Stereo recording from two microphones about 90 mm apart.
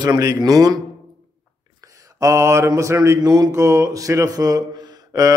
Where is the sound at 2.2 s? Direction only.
35° right (ahead or behind).